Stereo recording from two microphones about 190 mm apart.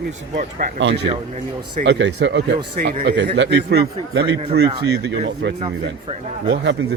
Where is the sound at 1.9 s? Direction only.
70° right (ahead or behind).